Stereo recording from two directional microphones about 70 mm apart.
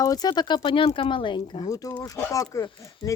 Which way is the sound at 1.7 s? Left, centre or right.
Left.